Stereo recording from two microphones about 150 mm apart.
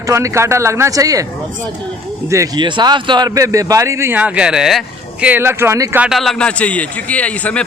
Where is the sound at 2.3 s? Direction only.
25° right (ahead or behind); by 4.8 s 5° right (ahead or behind).